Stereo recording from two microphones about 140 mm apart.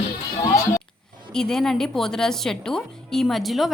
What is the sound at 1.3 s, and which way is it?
A woman's voice, 5° left (ahead or behind).